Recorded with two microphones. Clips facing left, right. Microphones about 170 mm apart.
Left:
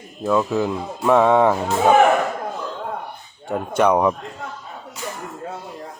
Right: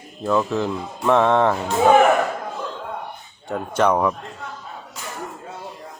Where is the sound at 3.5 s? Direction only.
10° left (ahead or behind).